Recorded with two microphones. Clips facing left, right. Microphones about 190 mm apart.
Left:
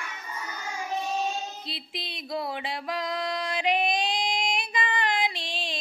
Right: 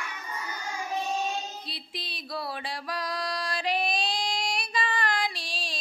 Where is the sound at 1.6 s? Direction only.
20° left (ahead or behind).